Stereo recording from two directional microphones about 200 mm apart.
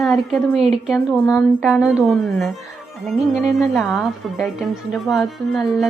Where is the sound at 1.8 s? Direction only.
5° right (ahead or behind).